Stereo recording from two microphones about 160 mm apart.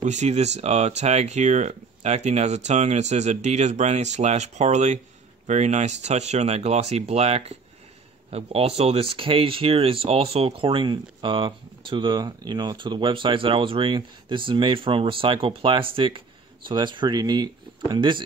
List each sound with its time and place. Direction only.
0.0 s speech: 45° right (ahead or behind); by 18.2 s 30° right (ahead or behind)